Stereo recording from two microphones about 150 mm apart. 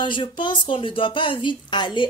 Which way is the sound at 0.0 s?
30° left (ahead or behind).